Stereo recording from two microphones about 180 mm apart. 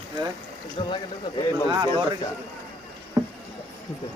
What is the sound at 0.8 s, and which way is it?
Speech, 30° left (ahead or behind).